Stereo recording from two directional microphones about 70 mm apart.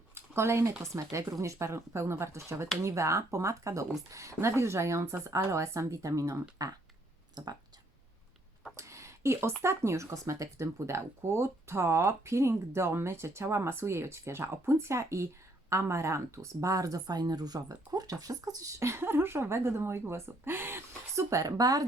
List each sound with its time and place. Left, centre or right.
0.1 s a sound: right
0.8 s speech: right
7.4 s speech: right
8.7 s a sound: right
9.6 s speech: right
18.8 s speech: right